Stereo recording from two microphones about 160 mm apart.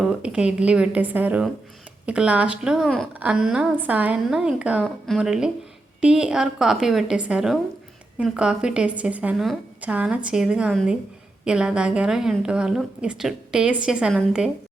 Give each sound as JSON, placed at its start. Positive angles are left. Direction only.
{"t": 0.0, "sound": "a woman's voice", "side_deg": -5}